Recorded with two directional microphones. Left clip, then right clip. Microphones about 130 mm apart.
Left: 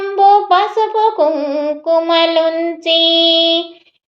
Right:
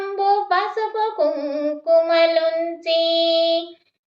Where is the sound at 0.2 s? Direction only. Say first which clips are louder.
Left 9 dB; 20° left (ahead or behind).